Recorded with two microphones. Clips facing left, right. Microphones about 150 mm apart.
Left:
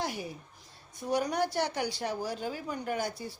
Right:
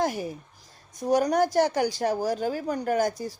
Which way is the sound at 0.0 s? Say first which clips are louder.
Right 8 dB; 45° right (ahead or behind).